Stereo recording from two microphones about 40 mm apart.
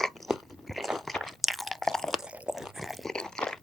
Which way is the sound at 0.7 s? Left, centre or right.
Centre.